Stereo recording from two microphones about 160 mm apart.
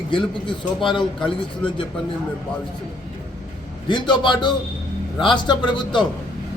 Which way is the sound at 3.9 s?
30° left (ahead or behind).